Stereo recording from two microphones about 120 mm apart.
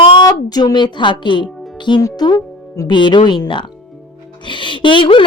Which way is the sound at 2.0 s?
30° left (ahead or behind).